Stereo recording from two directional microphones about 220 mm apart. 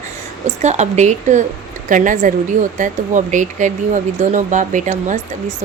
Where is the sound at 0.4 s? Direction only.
30° right (ahead or behind).